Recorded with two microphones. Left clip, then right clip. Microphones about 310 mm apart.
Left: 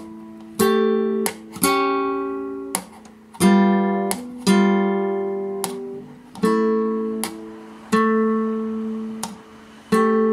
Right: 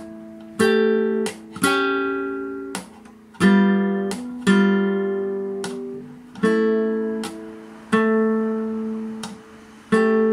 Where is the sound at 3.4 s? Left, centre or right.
Centre.